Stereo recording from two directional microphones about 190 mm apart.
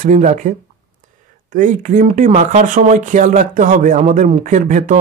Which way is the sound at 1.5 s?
40° right (ahead or behind).